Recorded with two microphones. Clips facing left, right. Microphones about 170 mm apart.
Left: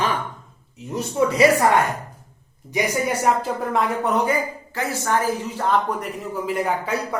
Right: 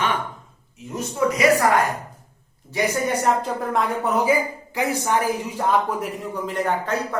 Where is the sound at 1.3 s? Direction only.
30° left (ahead or behind).